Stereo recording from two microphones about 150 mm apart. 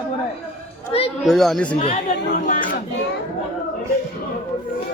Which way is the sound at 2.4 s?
60° left (ahead or behind).